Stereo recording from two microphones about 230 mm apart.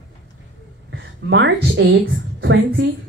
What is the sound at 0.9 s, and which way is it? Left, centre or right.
A woman's voice, right.